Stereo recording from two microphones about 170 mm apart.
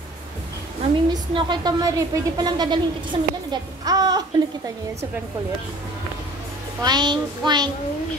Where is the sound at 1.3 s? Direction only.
25° right (ahead or behind).